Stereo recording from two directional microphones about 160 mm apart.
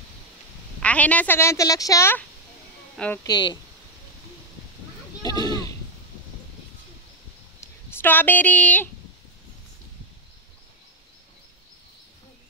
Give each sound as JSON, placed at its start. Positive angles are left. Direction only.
{"t": 0.8, "sound": "a woman's voice", "side_deg": 10}
{"t": 3.3, "sound": "speech", "side_deg": 30}
{"t": 5.2, "sound": "a sound", "side_deg": 25}
{"t": 7.6, "sound": "speech", "side_deg": 15}